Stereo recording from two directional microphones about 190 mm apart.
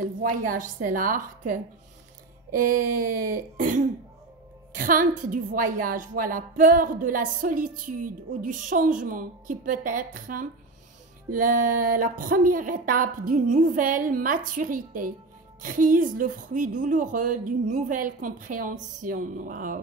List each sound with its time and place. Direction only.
0.0 s a woman's voice: 45° right (ahead or behind)
2.6 s a woman's voice: 50° right (ahead or behind)